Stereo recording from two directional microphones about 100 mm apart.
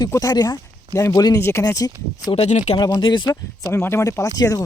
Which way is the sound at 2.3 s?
65° left (ahead or behind).